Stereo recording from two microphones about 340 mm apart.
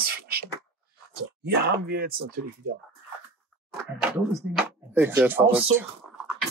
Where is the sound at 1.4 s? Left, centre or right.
Right.